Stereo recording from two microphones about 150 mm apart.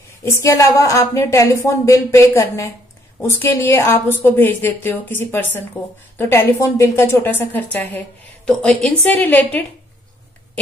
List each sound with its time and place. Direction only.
0.2 s a woman's voice: 20° left (ahead or behind)